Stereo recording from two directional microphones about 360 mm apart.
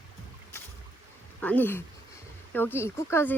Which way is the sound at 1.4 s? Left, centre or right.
Centre.